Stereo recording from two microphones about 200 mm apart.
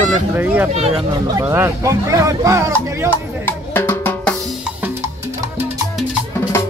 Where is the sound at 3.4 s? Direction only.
10° left (ahead or behind).